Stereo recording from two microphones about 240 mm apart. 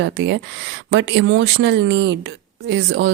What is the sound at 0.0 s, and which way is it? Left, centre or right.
Speech, right.